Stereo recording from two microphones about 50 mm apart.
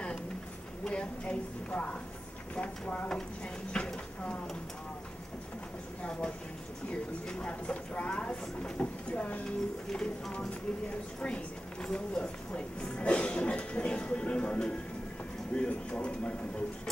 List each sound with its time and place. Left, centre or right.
0.8 s a woman's voice: left
6.9 s a woman's voice: centre
9.8 s speech: centre
11.1 s a woman's voice: centre